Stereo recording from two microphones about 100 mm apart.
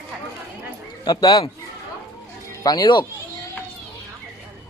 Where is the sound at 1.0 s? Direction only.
45° left (ahead or behind).